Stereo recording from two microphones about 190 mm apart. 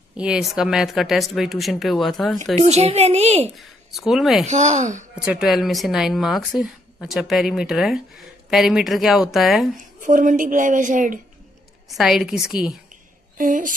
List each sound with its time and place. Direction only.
0.2 s a woman's voice: centre (ahead or behind)
2.6 s a woman's voice: 30° right (ahead or behind)
3.5 s speech: centre (ahead or behind)
4.5 s a woman's voice: 40° right (ahead or behind)
5.1 s a woman's voice: 5° right (ahead or behind)
10.0 s a woman's voice: 45° right (ahead or behind)
11.9 s a woman's voice: centre (ahead or behind)
13.4 s a woman's voice: 45° right (ahead or behind)